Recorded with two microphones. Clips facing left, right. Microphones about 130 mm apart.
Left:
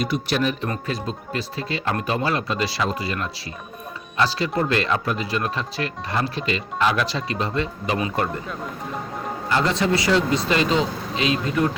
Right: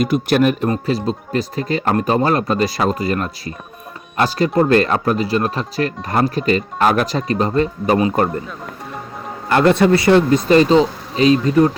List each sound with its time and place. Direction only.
0.0 s speech: 50° right (ahead or behind)
0.7 s speech: 35° right (ahead or behind)
9.5 s speech: 60° right (ahead or behind); by 11.7 s 40° right (ahead or behind)